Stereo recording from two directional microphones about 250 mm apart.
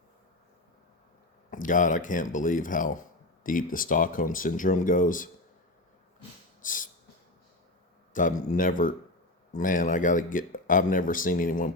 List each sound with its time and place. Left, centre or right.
1.5 s speech: left
6.6 s a sound: left
8.1 s speech: left